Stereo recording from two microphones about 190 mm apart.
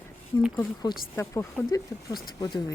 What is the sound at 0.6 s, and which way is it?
Speech, 15° left (ahead or behind).